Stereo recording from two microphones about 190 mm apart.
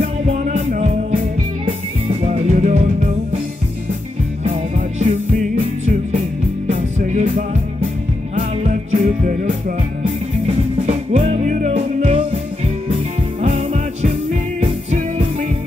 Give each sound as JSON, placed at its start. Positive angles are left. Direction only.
{"t": 0.0, "sound": "music", "side_deg": -35}
{"t": 2.2, "sound": "music", "side_deg": -35}
{"t": 4.7, "sound": "music", "side_deg": -40}